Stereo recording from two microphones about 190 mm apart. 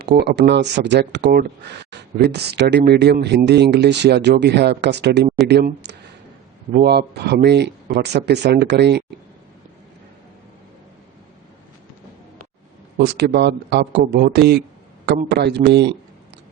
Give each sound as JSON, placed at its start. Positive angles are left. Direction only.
{"t": 0.0, "sound": "speech", "side_deg": -60}
{"t": 13.0, "sound": "speech", "side_deg": -60}